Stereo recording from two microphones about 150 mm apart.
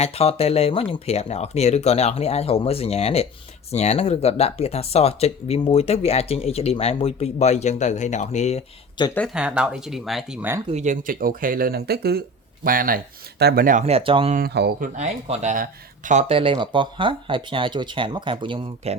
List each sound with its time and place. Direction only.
0.0 s speech: 40° left (ahead or behind)
9.0 s speech: 30° left (ahead or behind)
9.3 s speech: 5° right (ahead or behind)
10.7 s speech: 50° right (ahead or behind)
11.0 s speech: 70° right (ahead or behind); by 12.2 s 90° right
12.6 s speech: 70° right (ahead or behind)
13.4 s speech: 85° right
13.8 s speech: 40° right (ahead or behind)
14.3 s speech: 90° right
14.9 s speech: 50° right (ahead or behind)
16.3 s speech: 35° right (ahead or behind)